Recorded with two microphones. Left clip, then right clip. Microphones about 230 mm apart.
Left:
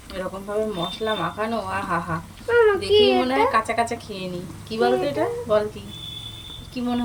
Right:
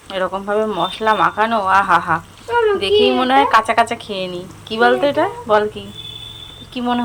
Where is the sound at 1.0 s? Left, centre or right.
Right.